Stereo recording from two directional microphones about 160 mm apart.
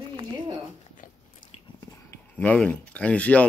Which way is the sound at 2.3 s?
5° left (ahead or behind).